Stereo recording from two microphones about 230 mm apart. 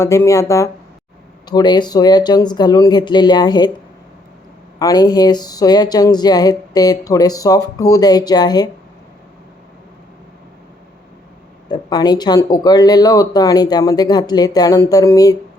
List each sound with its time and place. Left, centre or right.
0.0 s speech: centre
4.8 s speech: centre
11.7 s speech: centre